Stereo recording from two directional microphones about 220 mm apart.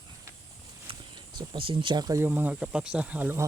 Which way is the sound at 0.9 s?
20° right (ahead or behind).